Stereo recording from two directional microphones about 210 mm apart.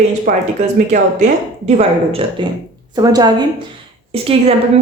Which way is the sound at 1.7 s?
35° right (ahead or behind).